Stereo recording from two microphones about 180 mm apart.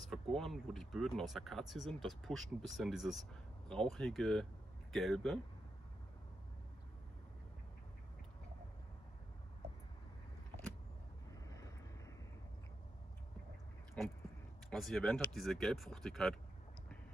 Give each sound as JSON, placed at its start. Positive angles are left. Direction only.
{"t": 0.0, "sound": "speech", "side_deg": 0}
{"t": 11.4, "sound": "vehicle", "side_deg": 20}
{"t": 14.0, "sound": "speech", "side_deg": 5}